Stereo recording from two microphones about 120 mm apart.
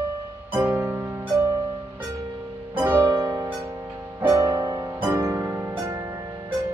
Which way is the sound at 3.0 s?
30° right (ahead or behind).